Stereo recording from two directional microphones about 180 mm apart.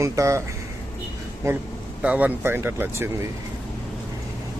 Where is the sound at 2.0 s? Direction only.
10° right (ahead or behind).